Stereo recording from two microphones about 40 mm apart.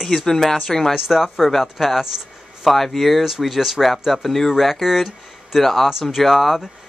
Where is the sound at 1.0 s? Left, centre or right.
Centre.